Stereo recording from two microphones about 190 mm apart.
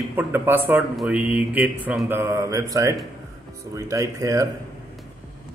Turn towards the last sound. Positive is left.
turn(degrees=-15)  # may be behind; listen again after turning